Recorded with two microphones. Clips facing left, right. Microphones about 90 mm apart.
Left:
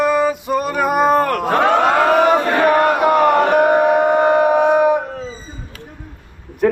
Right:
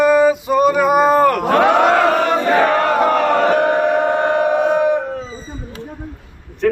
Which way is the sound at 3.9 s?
15° left (ahead or behind).